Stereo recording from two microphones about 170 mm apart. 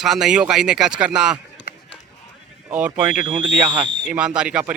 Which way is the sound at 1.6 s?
90° left.